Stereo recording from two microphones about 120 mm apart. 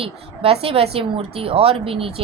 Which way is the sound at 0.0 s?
55° right (ahead or behind).